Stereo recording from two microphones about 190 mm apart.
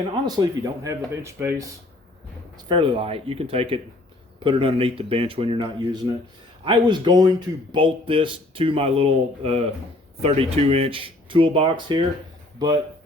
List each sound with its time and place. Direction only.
0.1 s speech: 20° right (ahead or behind)
2.6 s speech: 25° right (ahead or behind)